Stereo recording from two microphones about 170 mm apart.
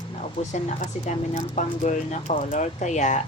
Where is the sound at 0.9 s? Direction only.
45° left (ahead or behind).